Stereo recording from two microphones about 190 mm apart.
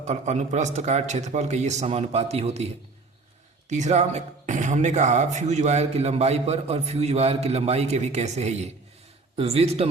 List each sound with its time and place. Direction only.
0.0 s speech: 35° right (ahead or behind)
3.7 s speech: 40° right (ahead or behind)